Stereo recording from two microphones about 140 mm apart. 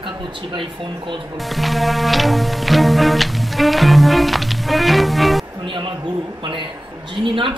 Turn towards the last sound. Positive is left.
turn(degrees=-35)  # may be behind; listen again after turning